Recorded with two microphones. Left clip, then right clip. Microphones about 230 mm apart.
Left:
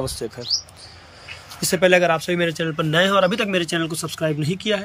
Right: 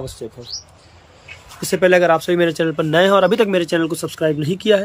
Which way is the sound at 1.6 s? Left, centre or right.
Centre.